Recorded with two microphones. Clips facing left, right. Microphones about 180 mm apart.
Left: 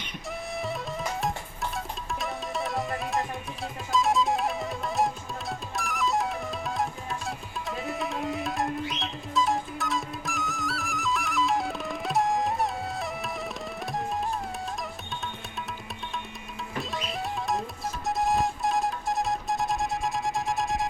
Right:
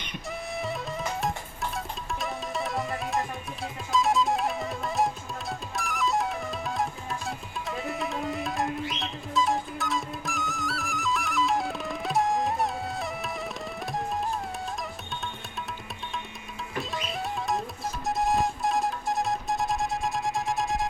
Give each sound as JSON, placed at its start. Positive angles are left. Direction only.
{"t": 0.3, "sound": "music", "side_deg": 0}
{"t": 16.9, "sound": "music", "side_deg": 0}